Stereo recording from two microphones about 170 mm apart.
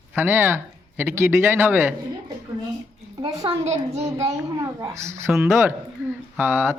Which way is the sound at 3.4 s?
40° right (ahead or behind).